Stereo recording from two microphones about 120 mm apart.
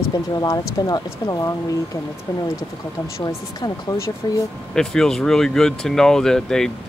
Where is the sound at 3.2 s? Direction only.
35° left (ahead or behind).